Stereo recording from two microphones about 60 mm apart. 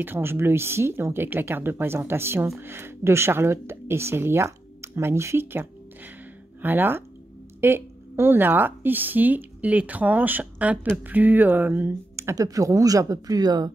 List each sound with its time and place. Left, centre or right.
0.0 s a woman's voice: right
12.4 s speech: right